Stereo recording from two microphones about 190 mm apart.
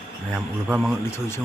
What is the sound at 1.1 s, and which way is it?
Speech, 10° left (ahead or behind).